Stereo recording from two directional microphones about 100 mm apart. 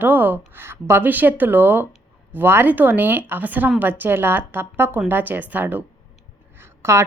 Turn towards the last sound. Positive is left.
turn(degrees=-25)  # may be behind; listen again after turning